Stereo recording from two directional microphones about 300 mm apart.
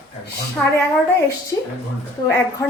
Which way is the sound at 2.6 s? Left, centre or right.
Centre.